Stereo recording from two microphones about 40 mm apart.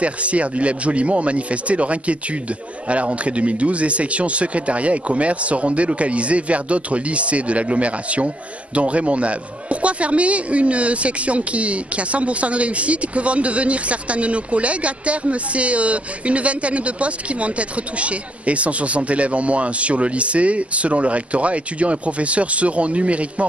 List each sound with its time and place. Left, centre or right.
0.0 s a man's voice: right